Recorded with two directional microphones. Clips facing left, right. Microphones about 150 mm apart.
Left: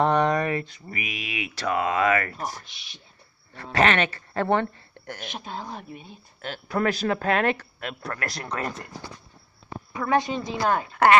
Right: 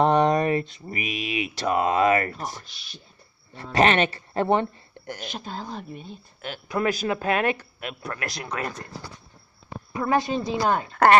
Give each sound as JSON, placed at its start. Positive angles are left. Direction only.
{"t": 0.0, "sound": "speech", "side_deg": -20}
{"t": 3.7, "sound": "speech", "side_deg": -20}
{"t": 5.1, "sound": "speech", "side_deg": -35}
{"t": 5.8, "sound": "speech", "side_deg": 5}
{"t": 6.4, "sound": "speech", "side_deg": -15}
{"t": 10.0, "sound": "speech", "side_deg": -20}
{"t": 10.9, "sound": "speech", "side_deg": -35}